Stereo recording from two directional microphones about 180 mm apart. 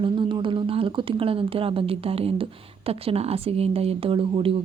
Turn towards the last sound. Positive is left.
turn(degrees=-30)  # may be behind; listen again after turning